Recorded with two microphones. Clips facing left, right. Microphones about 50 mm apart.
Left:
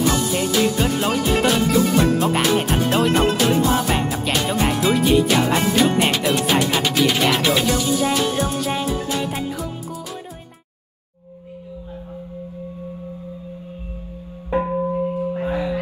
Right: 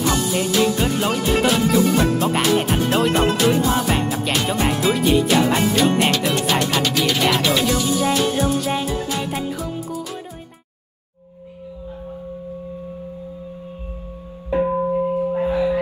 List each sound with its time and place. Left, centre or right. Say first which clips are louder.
0.0 s music: even; centre
14.9 s singing bowl: right 3 dB; right